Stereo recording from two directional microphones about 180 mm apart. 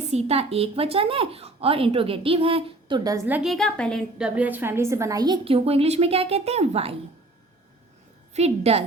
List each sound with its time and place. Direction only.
0.1 s a woman's voice: 35° right (ahead or behind); by 3.5 s 10° right (ahead or behind)
3.5 s a woman's voice: 5° left (ahead or behind)
4.4 s a woman's voice: 10° right (ahead or behind); by 6.9 s 35° right (ahead or behind)
8.3 s a woman's voice: 35° right (ahead or behind)